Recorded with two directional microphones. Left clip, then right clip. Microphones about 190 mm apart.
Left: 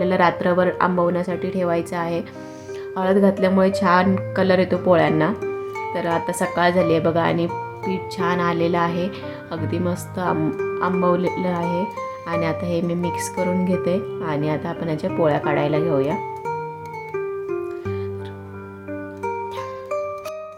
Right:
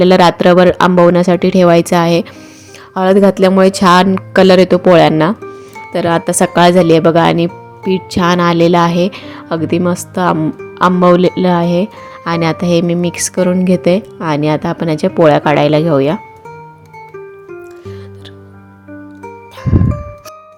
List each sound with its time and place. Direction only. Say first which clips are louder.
0.0 s speech: right 10 dB; 45° right (ahead or behind)